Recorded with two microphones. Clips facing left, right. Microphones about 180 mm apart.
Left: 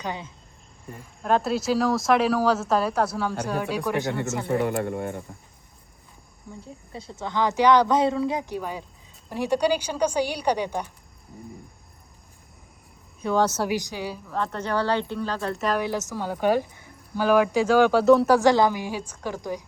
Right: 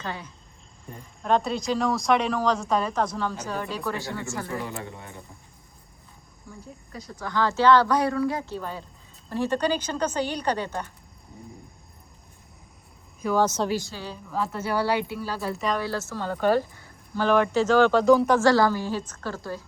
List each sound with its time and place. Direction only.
0.0 s speech: 20° left (ahead or behind)
0.9 s speech: 5° left (ahead or behind); by 4.1 s 20° left (ahead or behind)
4.4 s speech: 60° left (ahead or behind)
6.5 s speech: 25° left (ahead or behind)
13.6 s speech: 15° left (ahead or behind)
14.3 s speech: 5° right (ahead or behind)
15.8 s speech: 15° left (ahead or behind); by 18.3 s centre (ahead or behind)
18.3 s speech: 20° left (ahead or behind)